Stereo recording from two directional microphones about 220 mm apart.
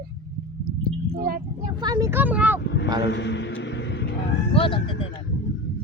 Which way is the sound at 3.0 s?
50° left (ahead or behind).